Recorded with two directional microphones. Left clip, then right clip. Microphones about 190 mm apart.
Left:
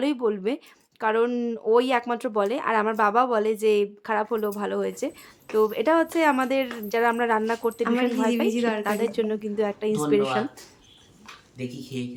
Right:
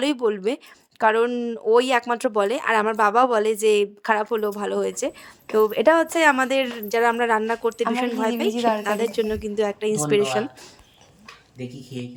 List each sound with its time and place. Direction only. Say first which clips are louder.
0.0 s a woman's voice: right 3 dB; 30° right (ahead or behind)
1.6 s a woman's voice: right 3 dB; 25° right (ahead or behind)